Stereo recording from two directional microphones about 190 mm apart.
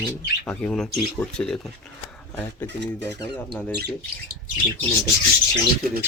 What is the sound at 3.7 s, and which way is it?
Speech, 55° right (ahead or behind).